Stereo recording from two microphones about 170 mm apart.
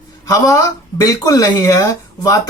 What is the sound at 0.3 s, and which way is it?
Speech, 20° left (ahead or behind).